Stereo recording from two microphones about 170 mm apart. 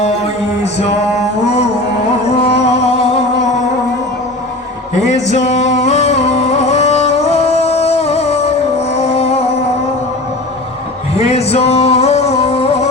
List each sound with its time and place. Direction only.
2.4 s music: 40° left (ahead or behind)
5.0 s a sound: 45° left (ahead or behind)
5.5 s music: 45° left (ahead or behind)
11.2 s music: 40° left (ahead or behind)